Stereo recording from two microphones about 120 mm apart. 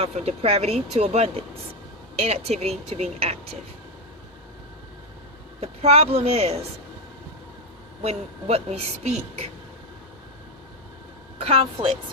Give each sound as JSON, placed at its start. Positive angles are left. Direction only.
{"t": 0.0, "sound": "speech", "side_deg": -55}
{"t": 5.5, "sound": "speech", "side_deg": -60}
{"t": 8.0, "sound": "speech", "side_deg": -60}
{"t": 11.4, "sound": "speech", "side_deg": -55}